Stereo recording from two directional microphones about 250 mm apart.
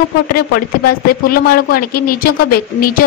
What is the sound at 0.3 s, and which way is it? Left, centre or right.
Speech, left.